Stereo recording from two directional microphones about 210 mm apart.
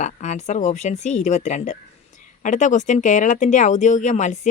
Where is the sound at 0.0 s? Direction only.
35° left (ahead or behind).